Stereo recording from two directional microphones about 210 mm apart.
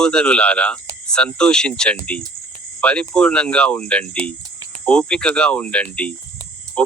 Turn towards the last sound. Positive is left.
turn(degrees=5)  # may be behind; listen again after turning